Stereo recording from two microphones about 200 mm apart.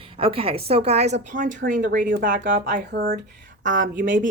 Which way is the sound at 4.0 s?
45° right (ahead or behind).